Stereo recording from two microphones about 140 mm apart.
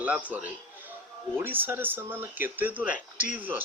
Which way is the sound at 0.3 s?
10° right (ahead or behind).